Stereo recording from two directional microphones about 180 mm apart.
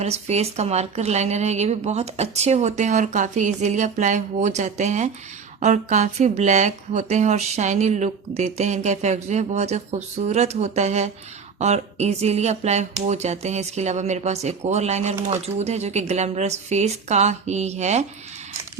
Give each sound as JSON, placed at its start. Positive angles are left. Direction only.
{"t": 0.0, "sound": "speech", "side_deg": -35}